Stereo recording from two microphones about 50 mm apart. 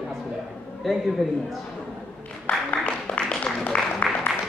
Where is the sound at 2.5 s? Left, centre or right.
Left.